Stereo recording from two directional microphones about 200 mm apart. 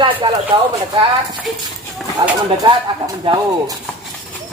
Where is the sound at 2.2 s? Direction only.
20° right (ahead or behind).